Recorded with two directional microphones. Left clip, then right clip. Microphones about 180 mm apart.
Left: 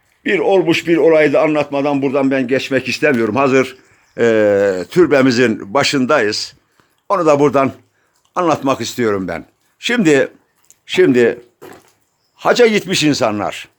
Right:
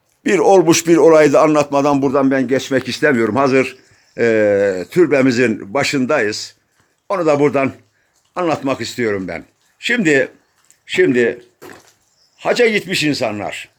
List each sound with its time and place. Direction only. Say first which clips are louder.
0.2 s a man's voice: right 2 dB; 25° right (ahead or behind)
2.5 s a man's voice: left 1 dB; centre (ahead or behind); by 11.3 s 20° left (ahead or behind)
12.4 s speech: left 3 dB; 20° left (ahead or behind)